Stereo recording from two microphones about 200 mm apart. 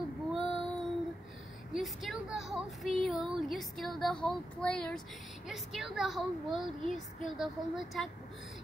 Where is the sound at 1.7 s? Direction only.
Centre (ahead or behind).